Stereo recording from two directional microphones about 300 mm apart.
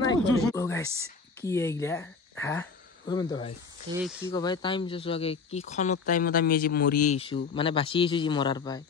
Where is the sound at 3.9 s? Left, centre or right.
Centre.